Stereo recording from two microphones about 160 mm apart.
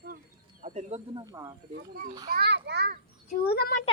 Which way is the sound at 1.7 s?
65° right (ahead or behind).